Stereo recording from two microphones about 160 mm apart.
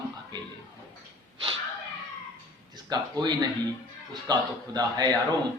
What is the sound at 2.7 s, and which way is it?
A man's voice, 25° right (ahead or behind).